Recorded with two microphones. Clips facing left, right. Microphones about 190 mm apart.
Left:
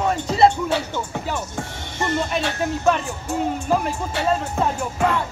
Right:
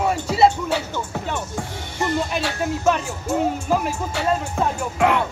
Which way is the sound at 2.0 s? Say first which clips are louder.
Even; centre (ahead or behind).